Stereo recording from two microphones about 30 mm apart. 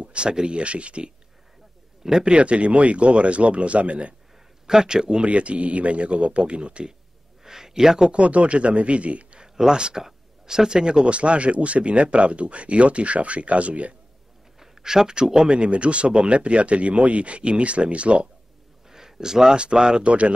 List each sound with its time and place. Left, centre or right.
0.0 s speech: right
2.2 s speech: right
4.6 s speech: right
5.2 s speech: right
7.4 s speech: centre
8.1 s speech: right
9.6 s speech: right
11.1 s speech: right
14.6 s speech: centre
15.5 s speech: right
18.9 s a sound: centre
19.5 s speech: right
20.1 s speech: right